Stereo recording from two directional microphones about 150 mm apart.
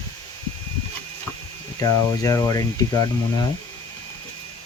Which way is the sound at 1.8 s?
20° left (ahead or behind).